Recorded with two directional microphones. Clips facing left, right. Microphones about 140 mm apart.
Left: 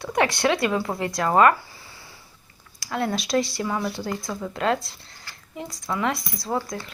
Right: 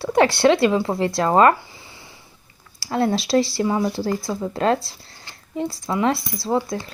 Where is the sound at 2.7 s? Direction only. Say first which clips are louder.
Right 5 dB; 30° right (ahead or behind).